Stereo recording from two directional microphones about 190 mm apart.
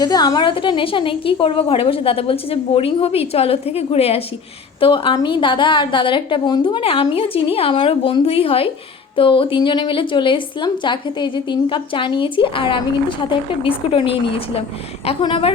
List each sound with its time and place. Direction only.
0.0 s a woman's voice: 20° left (ahead or behind)